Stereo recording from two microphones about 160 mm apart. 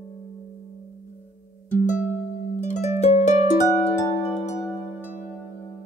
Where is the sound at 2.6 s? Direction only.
45° left (ahead or behind).